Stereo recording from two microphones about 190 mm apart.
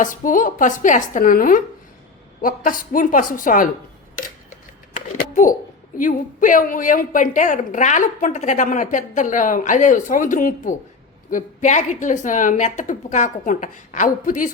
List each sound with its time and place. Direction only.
0.0 s a woman's voice: 45° left (ahead or behind)
5.1 s a sound: 45° left (ahead or behind)
6.0 s a woman's voice: 45° left (ahead or behind)